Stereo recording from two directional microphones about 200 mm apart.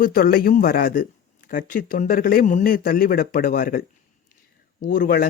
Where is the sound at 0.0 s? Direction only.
45° left (ahead or behind).